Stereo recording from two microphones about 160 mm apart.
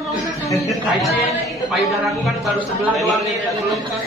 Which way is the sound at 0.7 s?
Centre (ahead or behind).